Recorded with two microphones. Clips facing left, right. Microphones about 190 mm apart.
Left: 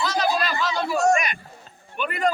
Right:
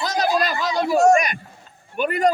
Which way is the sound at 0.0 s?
40° right (ahead or behind).